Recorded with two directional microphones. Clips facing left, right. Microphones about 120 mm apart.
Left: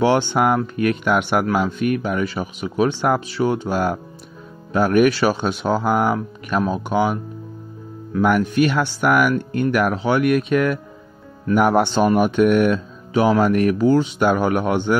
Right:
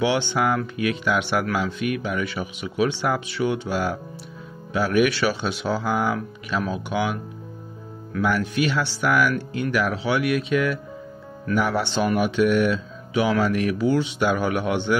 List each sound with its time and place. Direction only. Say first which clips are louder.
0.0 s speech: left 5 dB; 45° left (ahead or behind)
8.2 s speech: left 6 dB; 50° left (ahead or behind)